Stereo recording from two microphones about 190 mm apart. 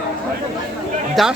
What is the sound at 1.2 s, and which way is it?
Speech, centre (ahead or behind).